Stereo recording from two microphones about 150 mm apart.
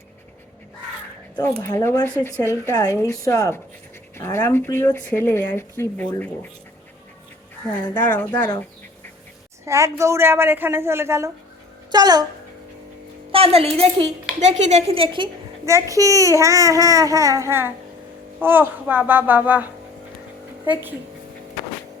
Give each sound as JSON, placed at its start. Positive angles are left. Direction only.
{"t": 1.6, "sound": "a woman's voice", "side_deg": 15}
{"t": 8.1, "sound": "speech", "side_deg": 15}
{"t": 9.6, "sound": "a woman's voice", "side_deg": -20}
{"t": 13.3, "sound": "a woman's voice", "side_deg": -40}
{"t": 15.6, "sound": "a child's voice", "side_deg": -20}